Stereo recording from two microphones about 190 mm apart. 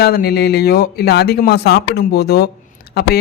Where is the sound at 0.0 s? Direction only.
55° left (ahead or behind).